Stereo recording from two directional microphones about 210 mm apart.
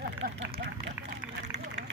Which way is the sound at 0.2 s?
55° right (ahead or behind).